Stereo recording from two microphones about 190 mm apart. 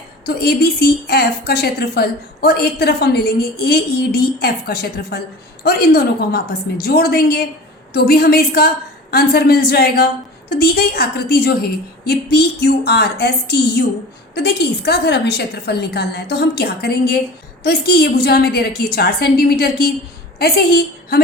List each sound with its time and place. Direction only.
0.3 s a woman's voice: 55° left (ahead or behind)